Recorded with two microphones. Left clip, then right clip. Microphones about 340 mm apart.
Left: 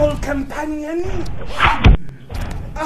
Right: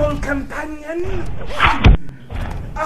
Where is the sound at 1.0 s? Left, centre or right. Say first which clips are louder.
Even; centre.